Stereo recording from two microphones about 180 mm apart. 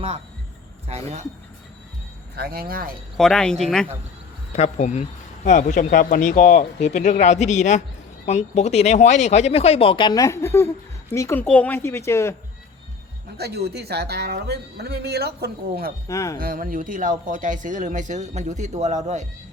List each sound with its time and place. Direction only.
0.9 s speech: 35° right (ahead or behind)
2.3 s speech: 55° right (ahead or behind)
3.2 s speech: 5° left (ahead or behind)
4.5 s speech: 40° left (ahead or behind); by 12.3 s 15° left (ahead or behind)
13.3 s speech: 65° right (ahead or behind)
16.0 s speech: 15° left (ahead or behind)
16.4 s speech: 50° right (ahead or behind)